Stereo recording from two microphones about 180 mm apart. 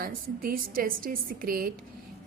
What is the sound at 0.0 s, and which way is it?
A woman's voice, 50° right (ahead or behind).